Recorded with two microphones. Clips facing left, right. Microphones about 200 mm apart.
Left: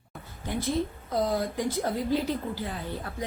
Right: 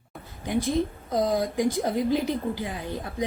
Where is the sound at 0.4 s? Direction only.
15° right (ahead or behind).